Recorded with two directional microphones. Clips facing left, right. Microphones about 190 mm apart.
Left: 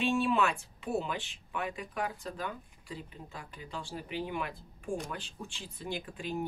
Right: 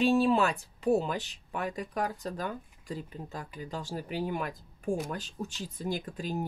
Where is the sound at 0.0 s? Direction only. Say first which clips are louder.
Right 4 dB; 35° right (ahead or behind).